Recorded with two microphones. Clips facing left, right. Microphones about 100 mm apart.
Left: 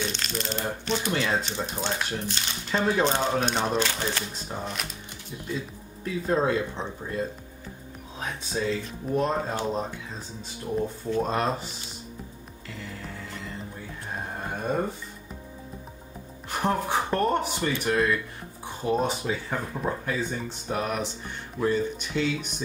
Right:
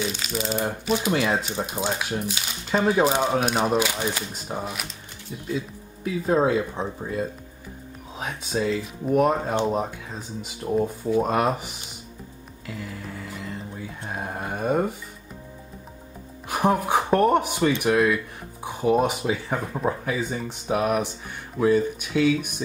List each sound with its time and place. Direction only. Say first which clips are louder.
0.0 s speech: right 3 dB; 5° right (ahead or behind)
6.2 s speech: right 4 dB; 5° right (ahead or behind)
8.2 s speech: right 3 dB; 5° right (ahead or behind)
10.6 s speech: right 5 dB; 20° right (ahead or behind)
11.1 s speech: right 4 dB; 10° right (ahead or behind)
12.6 s music: right 4 dB; 5° right (ahead or behind)
14.1 s speech: right 3 dB; 5° right (ahead or behind)
16.4 s speech: right 4 dB; 10° right (ahead or behind)